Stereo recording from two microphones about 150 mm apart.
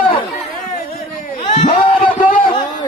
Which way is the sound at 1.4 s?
40° left (ahead or behind).